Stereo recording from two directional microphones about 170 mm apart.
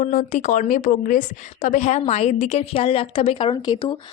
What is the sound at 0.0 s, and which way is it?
Speech, 50° left (ahead or behind).